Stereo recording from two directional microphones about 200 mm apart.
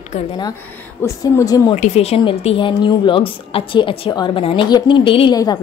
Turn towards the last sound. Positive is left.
turn(degrees=20)  # may be behind; listen again after turning